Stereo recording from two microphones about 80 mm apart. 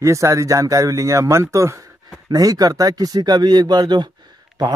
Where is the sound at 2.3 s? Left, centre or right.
Right.